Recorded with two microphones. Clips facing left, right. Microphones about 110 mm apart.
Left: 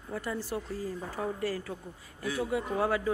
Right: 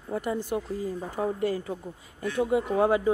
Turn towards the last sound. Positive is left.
turn(degrees=-25)  # may be behind; listen again after turning